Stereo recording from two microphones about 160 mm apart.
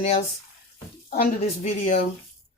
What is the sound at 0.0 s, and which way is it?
Speech, 40° left (ahead or behind).